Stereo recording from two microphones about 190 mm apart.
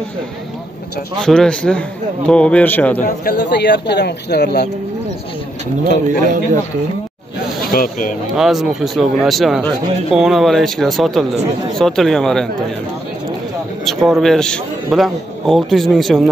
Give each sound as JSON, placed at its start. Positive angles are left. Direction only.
{"t": 1.2, "sound": "a man's voice", "side_deg": 5}
{"t": 3.3, "sound": "speech", "side_deg": 60}
{"t": 6.0, "sound": "a man's voice", "side_deg": -45}
{"t": 7.7, "sound": "speech", "side_deg": 50}
{"t": 8.4, "sound": "a man's voice", "side_deg": 0}
{"t": 13.8, "sound": "a man's voice", "side_deg": 0}